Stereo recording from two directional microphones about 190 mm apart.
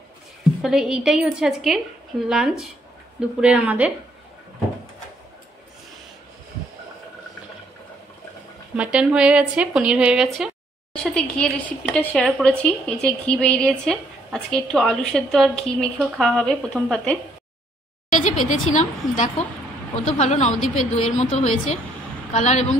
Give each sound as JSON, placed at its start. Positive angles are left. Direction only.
{"t": 0.4, "sound": "a woman's voice", "side_deg": 0}
{"t": 8.7, "sound": "speech", "side_deg": -5}
{"t": 18.1, "sound": "a woman's voice", "side_deg": 40}